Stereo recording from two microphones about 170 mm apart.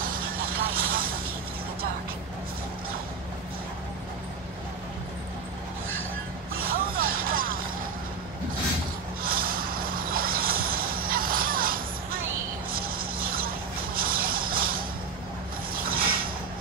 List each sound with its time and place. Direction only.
0.0 s vehicle: 55° right (ahead or behind)
6.5 s music: 60° right (ahead or behind)
9.2 s vehicle: 60° right (ahead or behind)
12.7 s a sound: 60° right (ahead or behind)
15.7 s mechanisms: 60° right (ahead or behind)